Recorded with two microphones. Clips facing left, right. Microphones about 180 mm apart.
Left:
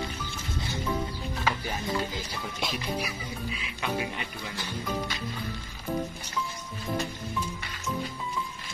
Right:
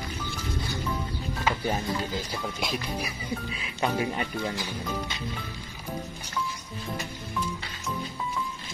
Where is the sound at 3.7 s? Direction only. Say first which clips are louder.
Right 5 dB; 40° right (ahead or behind).